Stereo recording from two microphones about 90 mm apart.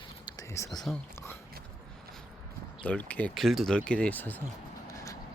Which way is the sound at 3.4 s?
Centre (ahead or behind).